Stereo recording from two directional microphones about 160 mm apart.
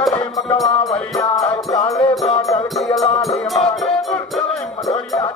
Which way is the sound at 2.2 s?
20° left (ahead or behind).